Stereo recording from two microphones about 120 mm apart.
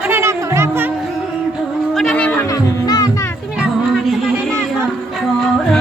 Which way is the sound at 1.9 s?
5° left (ahead or behind).